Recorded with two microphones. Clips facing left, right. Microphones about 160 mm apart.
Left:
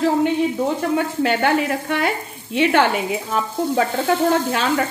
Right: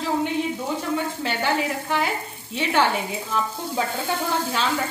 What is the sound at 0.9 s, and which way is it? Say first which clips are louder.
Speech: left 7 dB; 60° left (ahead or behind).